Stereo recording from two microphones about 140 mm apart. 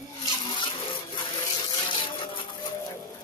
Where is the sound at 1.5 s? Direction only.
30° left (ahead or behind).